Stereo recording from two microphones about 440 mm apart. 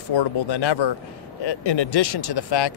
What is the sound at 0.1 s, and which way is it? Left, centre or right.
Speech, left.